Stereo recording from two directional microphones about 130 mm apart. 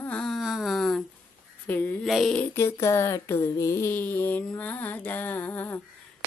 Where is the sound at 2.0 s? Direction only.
Centre (ahead or behind).